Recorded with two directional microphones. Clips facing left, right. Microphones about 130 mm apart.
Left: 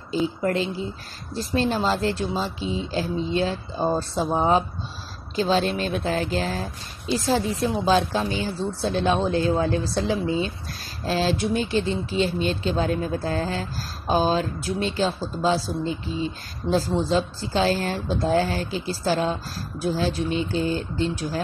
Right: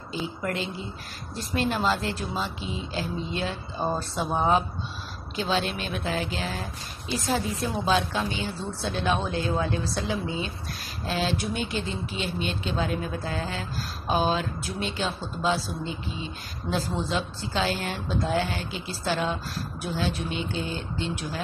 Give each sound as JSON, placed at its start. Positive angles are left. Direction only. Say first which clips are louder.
{"t": 0.4, "sound": "a woman's voice", "louder": "left 6 dB", "side_deg": 35}